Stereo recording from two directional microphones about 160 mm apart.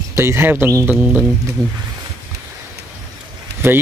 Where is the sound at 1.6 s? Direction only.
25° right (ahead or behind).